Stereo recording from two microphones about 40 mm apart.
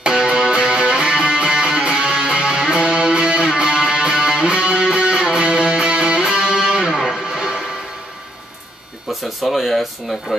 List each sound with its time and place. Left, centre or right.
0.3 s music: centre
6.9 s music: centre
7.2 s music: right
9.1 s speech: centre